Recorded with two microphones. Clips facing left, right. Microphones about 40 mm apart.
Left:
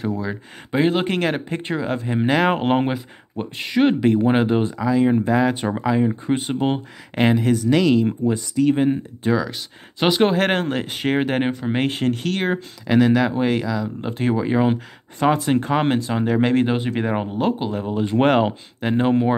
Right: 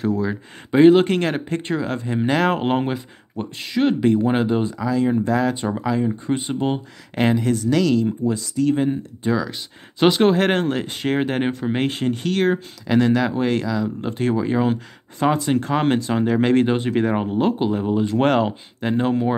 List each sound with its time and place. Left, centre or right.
0.2 s speech: centre
1.0 s speech: centre
4.0 s speech: centre
9.2 s speech: centre
18.0 s speech: centre